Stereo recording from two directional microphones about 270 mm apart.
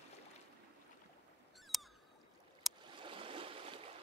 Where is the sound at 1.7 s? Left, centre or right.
Centre.